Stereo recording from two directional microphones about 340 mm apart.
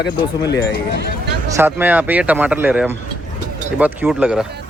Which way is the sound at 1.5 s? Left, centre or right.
Centre.